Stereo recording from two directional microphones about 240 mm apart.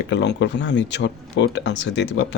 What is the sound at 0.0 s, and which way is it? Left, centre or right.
Speech, left.